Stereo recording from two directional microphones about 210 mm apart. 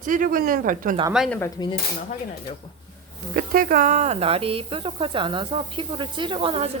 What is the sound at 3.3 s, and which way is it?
Speech, 45° right (ahead or behind).